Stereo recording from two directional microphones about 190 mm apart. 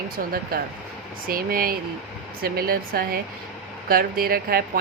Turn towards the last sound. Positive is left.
turn(degrees=-50)  # may be behind; listen again after turning